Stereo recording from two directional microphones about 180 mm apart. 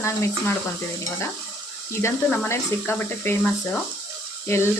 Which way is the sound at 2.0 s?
15° left (ahead or behind).